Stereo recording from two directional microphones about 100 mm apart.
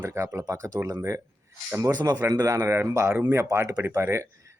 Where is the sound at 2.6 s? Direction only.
25° right (ahead or behind).